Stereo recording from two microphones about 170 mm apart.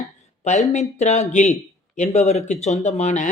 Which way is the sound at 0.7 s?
40° left (ahead or behind).